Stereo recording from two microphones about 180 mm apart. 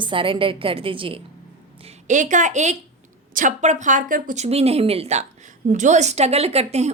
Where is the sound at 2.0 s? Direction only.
45° right (ahead or behind).